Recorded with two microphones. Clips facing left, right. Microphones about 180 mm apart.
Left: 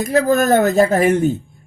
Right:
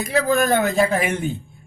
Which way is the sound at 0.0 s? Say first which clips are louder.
Left 4 dB; 45° left (ahead or behind).